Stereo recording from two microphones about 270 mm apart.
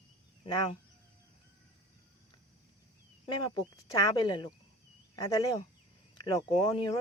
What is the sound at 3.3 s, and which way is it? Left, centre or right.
Speech, centre.